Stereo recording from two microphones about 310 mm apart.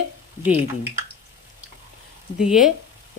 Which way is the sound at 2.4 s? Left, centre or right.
Centre.